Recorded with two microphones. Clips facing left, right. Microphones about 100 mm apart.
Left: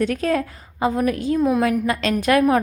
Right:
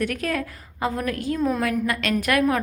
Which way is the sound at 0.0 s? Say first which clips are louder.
Left 5 dB; 25° left (ahead or behind).